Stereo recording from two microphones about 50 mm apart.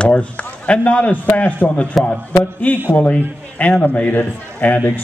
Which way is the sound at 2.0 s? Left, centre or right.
Centre.